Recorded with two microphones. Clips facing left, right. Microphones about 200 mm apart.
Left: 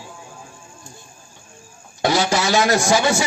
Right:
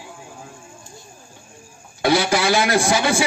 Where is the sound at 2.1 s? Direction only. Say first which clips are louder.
Right 1 dB; 60° right (ahead or behind).